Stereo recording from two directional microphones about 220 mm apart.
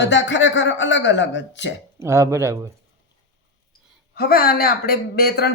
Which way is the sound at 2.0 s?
10° right (ahead or behind).